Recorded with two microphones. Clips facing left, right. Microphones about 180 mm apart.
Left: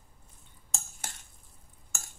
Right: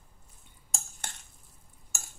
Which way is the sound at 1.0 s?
5° left (ahead or behind).